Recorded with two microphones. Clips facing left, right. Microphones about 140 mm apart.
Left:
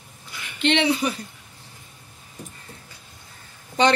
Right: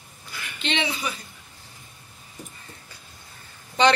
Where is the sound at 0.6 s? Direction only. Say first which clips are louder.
Left 8 dB; 60° left (ahead or behind).